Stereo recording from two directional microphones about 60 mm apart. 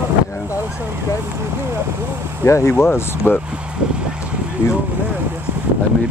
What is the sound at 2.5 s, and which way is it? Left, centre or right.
Speech, left.